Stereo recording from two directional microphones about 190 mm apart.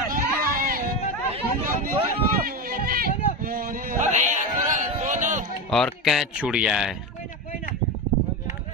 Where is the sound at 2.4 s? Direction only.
50° right (ahead or behind).